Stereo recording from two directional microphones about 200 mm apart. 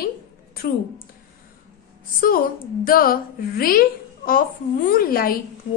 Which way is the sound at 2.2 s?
45° left (ahead or behind).